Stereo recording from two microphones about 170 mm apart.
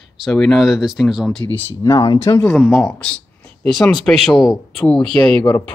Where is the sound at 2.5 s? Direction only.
Centre (ahead or behind).